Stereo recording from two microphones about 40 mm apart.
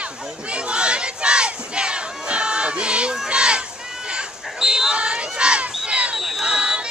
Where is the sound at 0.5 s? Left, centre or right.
Right.